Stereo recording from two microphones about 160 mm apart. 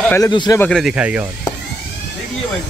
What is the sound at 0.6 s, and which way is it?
Speech, 5° left (ahead or behind).